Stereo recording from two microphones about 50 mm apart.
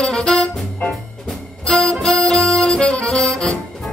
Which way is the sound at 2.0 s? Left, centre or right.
Centre.